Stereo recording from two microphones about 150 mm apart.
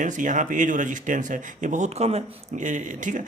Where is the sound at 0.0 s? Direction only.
55° right (ahead or behind).